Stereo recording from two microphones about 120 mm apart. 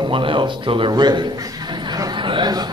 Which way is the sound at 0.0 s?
45° right (ahead or behind).